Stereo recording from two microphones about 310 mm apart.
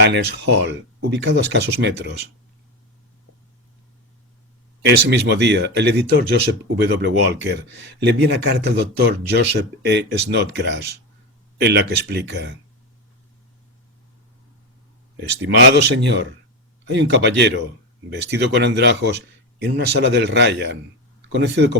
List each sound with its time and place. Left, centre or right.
0.0 s speech: right
5.0 s speech: right
15.4 s speech: right